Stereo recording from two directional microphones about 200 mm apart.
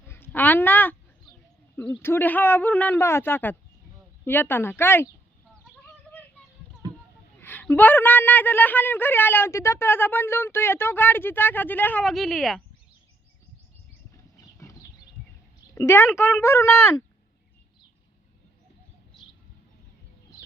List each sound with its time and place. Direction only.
0.1 s a sound: 10° left (ahead or behind)
1.7 s a woman's voice: 5° left (ahead or behind)
5.6 s a sound: 10° left (ahead or behind)
6.8 s boat: 20° right (ahead or behind)
7.3 s a woman's voice: 10° left (ahead or behind)
14.3 s horse: 15° left (ahead or behind)
15.7 s a woman's voice: 15° left (ahead or behind)